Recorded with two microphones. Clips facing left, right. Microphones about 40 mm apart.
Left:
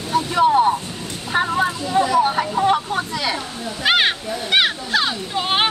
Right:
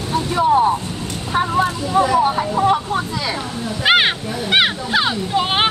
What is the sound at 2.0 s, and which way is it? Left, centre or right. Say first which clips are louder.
Vehicle: right 2 dB; centre.